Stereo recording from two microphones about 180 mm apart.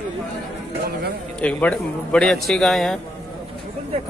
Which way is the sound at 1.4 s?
10° left (ahead or behind).